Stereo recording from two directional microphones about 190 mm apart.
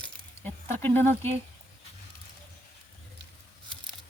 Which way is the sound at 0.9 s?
10° left (ahead or behind).